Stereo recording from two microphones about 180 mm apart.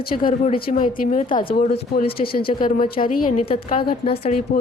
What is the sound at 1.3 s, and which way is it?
A woman's voice, 30° left (ahead or behind).